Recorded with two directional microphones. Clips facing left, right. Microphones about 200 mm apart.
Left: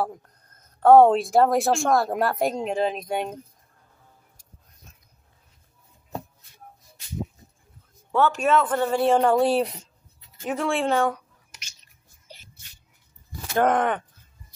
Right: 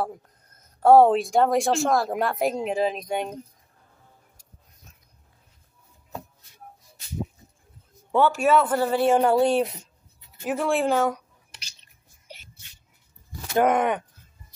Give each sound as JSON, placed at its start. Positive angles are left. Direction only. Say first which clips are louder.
{"t": 0.7, "sound": "a woman's voice", "louder": "left 1 dB", "side_deg": -5}
{"t": 8.1, "sound": "a woman's voice", "louder": "right 1 dB", "side_deg": -10}
{"t": 11.5, "sound": "a sound", "louder": "right 1 dB", "side_deg": -30}
{"t": 13.6, "sound": "a woman's voice", "louder": "right 1 dB", "side_deg": -10}